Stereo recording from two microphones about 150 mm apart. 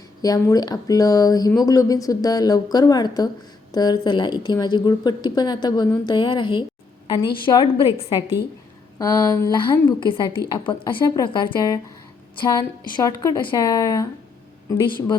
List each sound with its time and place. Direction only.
0.2 s a woman's voice: 25° left (ahead or behind)
9.0 s speech: 25° left (ahead or behind)